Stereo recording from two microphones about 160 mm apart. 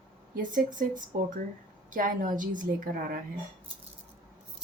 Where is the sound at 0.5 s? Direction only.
55° right (ahead or behind).